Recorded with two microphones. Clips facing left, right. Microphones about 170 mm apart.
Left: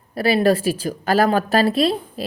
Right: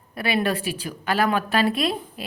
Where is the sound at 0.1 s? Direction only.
35° left (ahead or behind).